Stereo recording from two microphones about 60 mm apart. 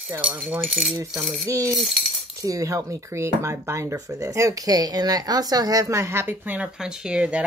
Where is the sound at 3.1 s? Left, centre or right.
Right.